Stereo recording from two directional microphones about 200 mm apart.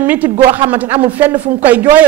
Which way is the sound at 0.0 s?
10° right (ahead or behind).